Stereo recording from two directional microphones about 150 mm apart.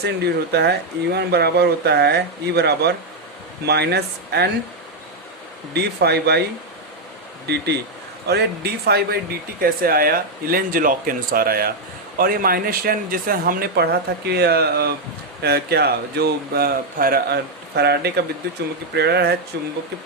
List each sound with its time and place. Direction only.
0.5 s speech: 90° right
5.7 s speech: 90° right
7.4 s speech: 90° right